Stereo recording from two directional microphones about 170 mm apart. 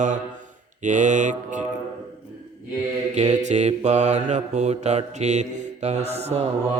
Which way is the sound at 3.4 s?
40° right (ahead or behind).